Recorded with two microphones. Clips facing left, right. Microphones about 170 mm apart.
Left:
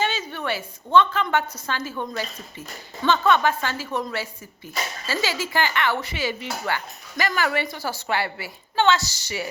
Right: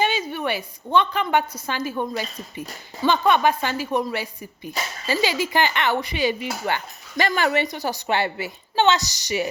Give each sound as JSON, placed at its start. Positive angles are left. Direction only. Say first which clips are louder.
{"t": 0.0, "sound": "a woman's voice", "louder": "right 3 dB", "side_deg": -10}